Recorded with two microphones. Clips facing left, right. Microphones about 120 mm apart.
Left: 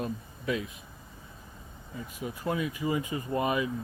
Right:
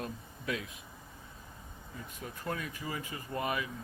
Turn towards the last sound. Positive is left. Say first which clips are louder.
# left 6 dB
turn(degrees=20)  # may be behind; listen again after turning